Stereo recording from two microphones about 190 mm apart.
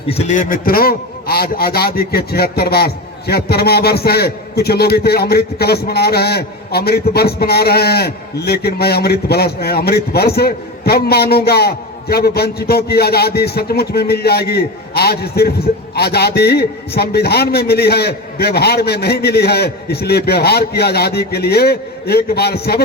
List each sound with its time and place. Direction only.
0.1 s a man's voice: 35° left (ahead or behind); by 22.8 s 55° left (ahead or behind)